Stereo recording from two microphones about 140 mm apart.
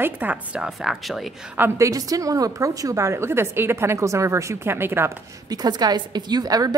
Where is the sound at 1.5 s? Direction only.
20° right (ahead or behind).